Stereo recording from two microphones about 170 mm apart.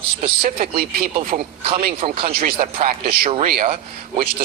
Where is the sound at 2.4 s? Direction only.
55° right (ahead or behind).